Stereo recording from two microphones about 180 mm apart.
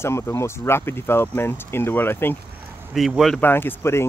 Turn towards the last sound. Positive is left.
turn(degrees=15)  # may be behind; listen again after turning